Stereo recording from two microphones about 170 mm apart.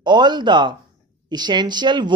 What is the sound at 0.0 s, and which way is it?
Speech, 25° right (ahead or behind).